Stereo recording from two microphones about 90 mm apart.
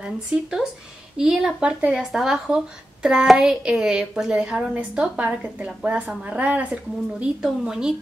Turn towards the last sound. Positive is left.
turn(degrees=-5)  # may be behind; listen again after turning